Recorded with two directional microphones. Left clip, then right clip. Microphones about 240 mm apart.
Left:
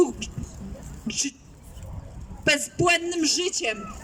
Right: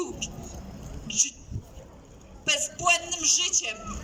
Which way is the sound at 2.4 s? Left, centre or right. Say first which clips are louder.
Left 3 dB; left.